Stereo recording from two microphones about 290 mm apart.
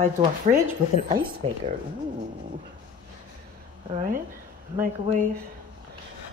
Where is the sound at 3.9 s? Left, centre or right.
Right.